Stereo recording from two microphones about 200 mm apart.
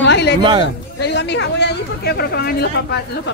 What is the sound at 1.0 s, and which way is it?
Speech, 60° left (ahead or behind).